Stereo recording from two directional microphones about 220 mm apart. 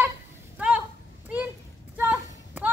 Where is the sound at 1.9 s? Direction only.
10° right (ahead or behind).